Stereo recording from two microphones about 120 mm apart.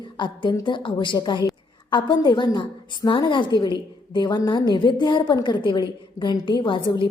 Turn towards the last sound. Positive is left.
turn(degrees=45)  # may be behind; listen again after turning